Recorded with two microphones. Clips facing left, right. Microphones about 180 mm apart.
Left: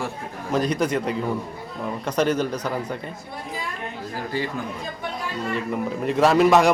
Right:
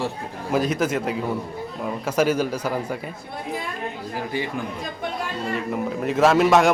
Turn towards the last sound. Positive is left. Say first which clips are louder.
# even
turn(degrees=0)  # may be behind; listen again after turning